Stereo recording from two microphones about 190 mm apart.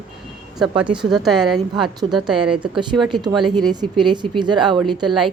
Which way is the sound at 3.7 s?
25° right (ahead or behind).